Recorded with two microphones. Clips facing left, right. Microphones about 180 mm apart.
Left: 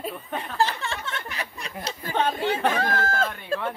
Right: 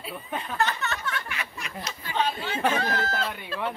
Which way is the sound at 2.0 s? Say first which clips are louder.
Left 4 dB; 50° left (ahead or behind).